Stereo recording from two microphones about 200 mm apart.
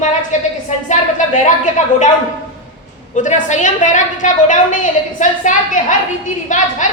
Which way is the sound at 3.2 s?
40° left (ahead or behind).